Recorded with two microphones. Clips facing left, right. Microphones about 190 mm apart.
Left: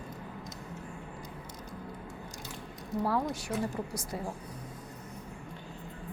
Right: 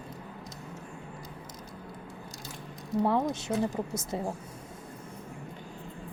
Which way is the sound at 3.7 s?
25° right (ahead or behind).